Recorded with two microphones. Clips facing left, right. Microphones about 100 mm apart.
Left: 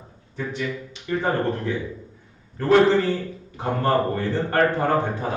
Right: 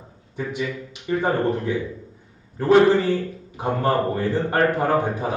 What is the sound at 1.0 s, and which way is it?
Speech, 15° right (ahead or behind).